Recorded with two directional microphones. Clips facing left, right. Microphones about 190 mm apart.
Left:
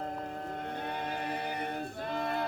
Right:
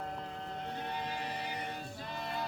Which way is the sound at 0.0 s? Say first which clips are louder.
Left 4 dB; 45° left (ahead or behind).